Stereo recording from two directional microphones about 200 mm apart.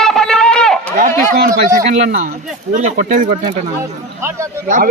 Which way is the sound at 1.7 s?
35° right (ahead or behind).